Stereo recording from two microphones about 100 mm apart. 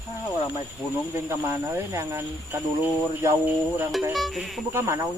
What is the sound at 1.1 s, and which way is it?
Speech, 25° right (ahead or behind).